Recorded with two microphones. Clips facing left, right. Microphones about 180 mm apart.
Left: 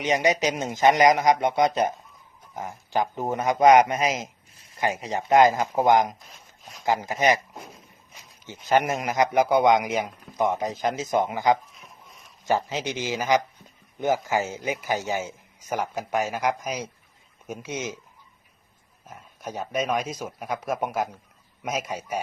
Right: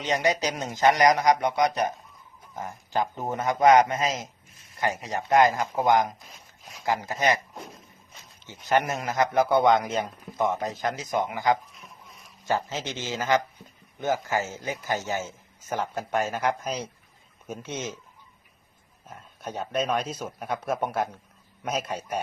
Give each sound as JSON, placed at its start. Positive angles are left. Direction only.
{"t": 0.0, "sound": "a man's voice", "side_deg": 20}
{"t": 6.2, "sound": "a sound", "side_deg": 0}
{"t": 6.8, "sound": "a man's voice", "side_deg": 20}
{"t": 11.7, "sound": "a sound", "side_deg": 0}
{"t": 12.5, "sound": "a man's voice", "side_deg": 15}
{"t": 19.0, "sound": "a man's voice", "side_deg": 10}